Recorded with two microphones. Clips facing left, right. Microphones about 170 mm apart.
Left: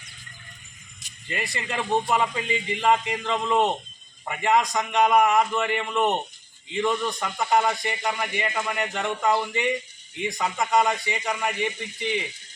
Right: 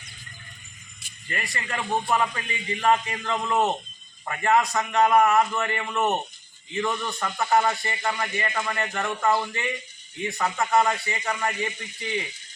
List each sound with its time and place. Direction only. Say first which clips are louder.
1.3 s a man's voice: left 2 dB; 20° left (ahead or behind)